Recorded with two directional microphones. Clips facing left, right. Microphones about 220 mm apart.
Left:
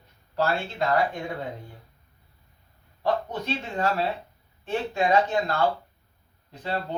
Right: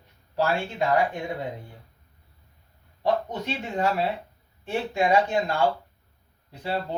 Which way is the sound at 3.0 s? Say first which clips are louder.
Right 1 dB; 15° right (ahead or behind).